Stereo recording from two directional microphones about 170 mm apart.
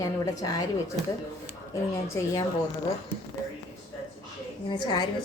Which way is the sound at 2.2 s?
15° left (ahead or behind).